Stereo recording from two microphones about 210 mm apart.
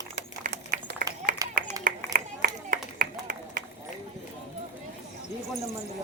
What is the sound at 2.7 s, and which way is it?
Clapping, 40° right (ahead or behind).